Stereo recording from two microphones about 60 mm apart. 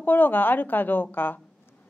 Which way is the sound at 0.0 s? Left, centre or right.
Left.